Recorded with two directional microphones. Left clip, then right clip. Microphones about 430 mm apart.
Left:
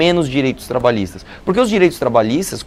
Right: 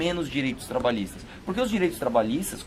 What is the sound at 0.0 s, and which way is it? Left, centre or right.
Speech, left.